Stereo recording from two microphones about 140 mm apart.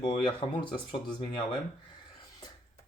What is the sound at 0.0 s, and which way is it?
Speech, 35° left (ahead or behind).